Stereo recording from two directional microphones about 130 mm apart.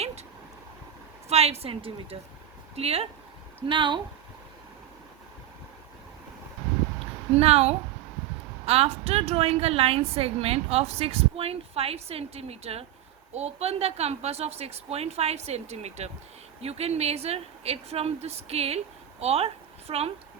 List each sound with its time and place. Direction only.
1.3 s a woman's voice: 50° right (ahead or behind)
3.7 s speech: 40° right (ahead or behind)
7.3 s a woman's voice: 50° right (ahead or behind)